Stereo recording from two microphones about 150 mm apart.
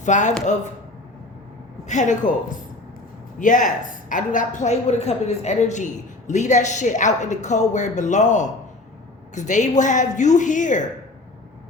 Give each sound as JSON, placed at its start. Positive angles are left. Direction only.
{"t": 0.0, "sound": "a woman's voice", "side_deg": 55}
{"t": 1.9, "sound": "a woman's voice", "side_deg": 55}